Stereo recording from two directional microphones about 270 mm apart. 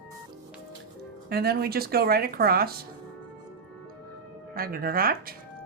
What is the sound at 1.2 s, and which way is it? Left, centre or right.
Speech, right.